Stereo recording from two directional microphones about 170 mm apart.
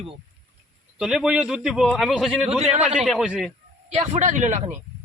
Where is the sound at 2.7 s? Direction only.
40° right (ahead or behind).